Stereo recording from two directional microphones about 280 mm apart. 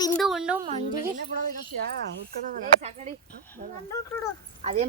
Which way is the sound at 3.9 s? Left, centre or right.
Centre.